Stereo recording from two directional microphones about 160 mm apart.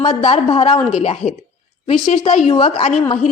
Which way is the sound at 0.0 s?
40° left (ahead or behind).